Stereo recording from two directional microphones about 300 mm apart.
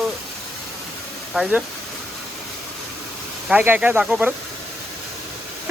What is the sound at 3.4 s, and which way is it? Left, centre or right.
Speech, centre.